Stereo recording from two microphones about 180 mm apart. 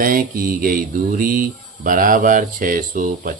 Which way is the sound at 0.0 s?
50° right (ahead or behind).